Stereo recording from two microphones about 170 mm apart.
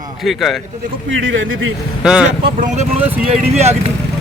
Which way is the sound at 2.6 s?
40° right (ahead or behind).